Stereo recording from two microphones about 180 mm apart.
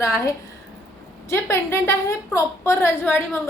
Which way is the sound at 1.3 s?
15° left (ahead or behind).